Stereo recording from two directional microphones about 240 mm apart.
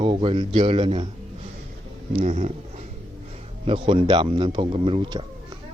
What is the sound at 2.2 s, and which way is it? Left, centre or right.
Speech, right.